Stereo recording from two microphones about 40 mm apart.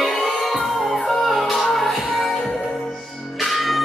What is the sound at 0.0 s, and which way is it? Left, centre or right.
Music, centre.